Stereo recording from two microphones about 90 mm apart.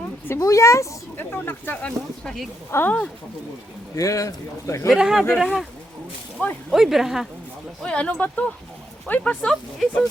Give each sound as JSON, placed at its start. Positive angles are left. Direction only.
{"t": 0.3, "sound": "speech", "side_deg": 35}
{"t": 1.1, "sound": "speech", "side_deg": 20}
{"t": 2.2, "sound": "speech", "side_deg": 5}
{"t": 2.6, "sound": "speech", "side_deg": 25}
{"t": 3.9, "sound": "speech", "side_deg": 40}
{"t": 4.9, "sound": "speech", "side_deg": -5}
{"t": 6.7, "sound": "speech", "side_deg": -5}
{"t": 7.8, "sound": "speech", "side_deg": 10}